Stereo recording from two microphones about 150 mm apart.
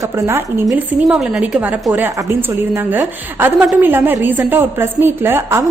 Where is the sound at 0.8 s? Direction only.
5° right (ahead or behind).